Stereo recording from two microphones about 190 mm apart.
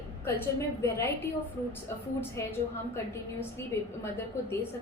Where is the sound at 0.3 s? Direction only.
15° left (ahead or behind).